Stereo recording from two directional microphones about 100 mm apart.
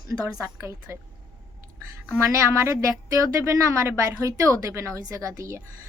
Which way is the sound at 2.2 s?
30° right (ahead or behind).